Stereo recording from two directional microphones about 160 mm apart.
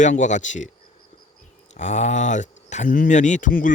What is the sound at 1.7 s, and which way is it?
Speech, 45° left (ahead or behind).